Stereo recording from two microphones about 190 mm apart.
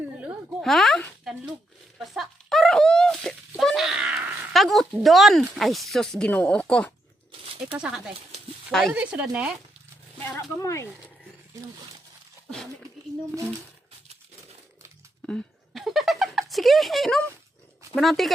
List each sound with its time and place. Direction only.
0.2 s a sound: centre (ahead or behind)
3.5 s wail: centre (ahead or behind)
5.0 s speech: centre (ahead or behind)
10.6 s speech: 15° left (ahead or behind)
15.3 s a sound: 5° left (ahead or behind)
17.9 s speech: centre (ahead or behind)